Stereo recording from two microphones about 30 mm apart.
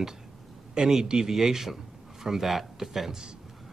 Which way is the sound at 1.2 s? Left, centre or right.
Centre.